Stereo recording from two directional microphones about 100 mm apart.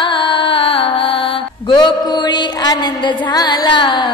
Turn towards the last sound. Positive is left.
turn(degrees=55)  # may be behind; listen again after turning